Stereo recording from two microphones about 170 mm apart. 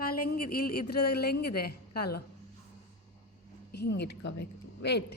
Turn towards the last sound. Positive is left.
turn(degrees=75)  # may be behind; listen again after turning